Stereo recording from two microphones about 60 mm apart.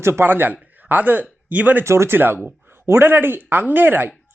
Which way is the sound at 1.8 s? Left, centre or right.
Right.